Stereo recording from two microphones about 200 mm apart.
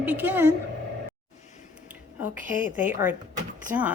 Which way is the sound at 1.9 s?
10° right (ahead or behind).